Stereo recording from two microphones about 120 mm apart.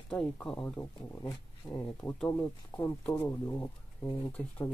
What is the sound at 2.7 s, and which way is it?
Speech, 45° left (ahead or behind).